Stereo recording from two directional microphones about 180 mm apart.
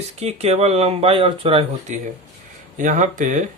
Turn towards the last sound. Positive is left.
turn(degrees=-45)  # may be behind; listen again after turning